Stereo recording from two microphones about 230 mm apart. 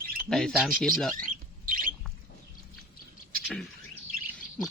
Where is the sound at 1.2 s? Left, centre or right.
Right.